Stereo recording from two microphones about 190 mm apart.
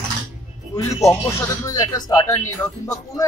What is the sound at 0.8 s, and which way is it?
Speech, 15° left (ahead or behind).